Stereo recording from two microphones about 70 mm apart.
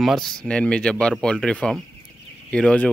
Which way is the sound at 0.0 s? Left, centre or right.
Centre.